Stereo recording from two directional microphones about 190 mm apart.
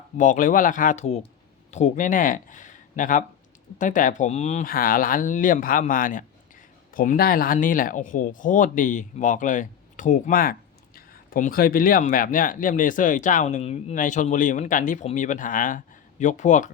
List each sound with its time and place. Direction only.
0.2 s speech: 45° left (ahead or behind)